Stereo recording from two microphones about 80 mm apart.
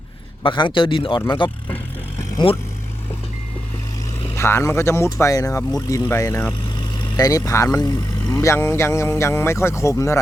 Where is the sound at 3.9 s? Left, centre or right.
Left.